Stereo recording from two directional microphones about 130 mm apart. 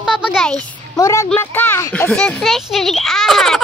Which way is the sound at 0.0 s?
5° right (ahead or behind).